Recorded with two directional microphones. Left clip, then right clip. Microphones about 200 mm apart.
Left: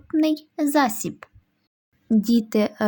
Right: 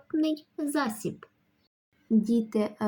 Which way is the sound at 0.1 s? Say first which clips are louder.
Left 7 dB; 50° left (ahead or behind).